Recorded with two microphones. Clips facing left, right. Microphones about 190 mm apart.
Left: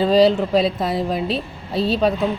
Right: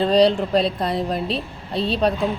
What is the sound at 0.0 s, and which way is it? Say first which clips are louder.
Speech: left 2 dB; centre (ahead or behind).